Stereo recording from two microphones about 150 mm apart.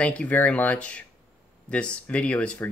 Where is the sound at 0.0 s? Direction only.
10° left (ahead or behind).